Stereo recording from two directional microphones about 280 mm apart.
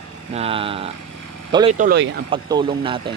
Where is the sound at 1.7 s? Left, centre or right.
Right.